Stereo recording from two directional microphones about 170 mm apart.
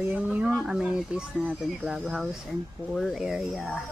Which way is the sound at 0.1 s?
5° right (ahead or behind).